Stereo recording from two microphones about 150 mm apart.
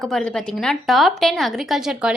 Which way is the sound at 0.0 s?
5° left (ahead or behind).